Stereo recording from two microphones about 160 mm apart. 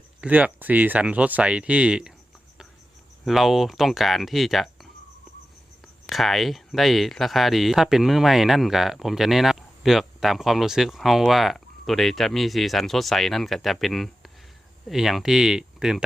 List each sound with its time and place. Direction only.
0.2 s speech: 10° right (ahead or behind)
3.2 s speech: centre (ahead or behind)
6.1 s speech: centre (ahead or behind)